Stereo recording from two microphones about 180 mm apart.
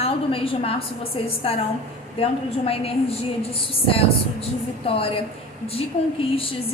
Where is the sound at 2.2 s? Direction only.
35° left (ahead or behind).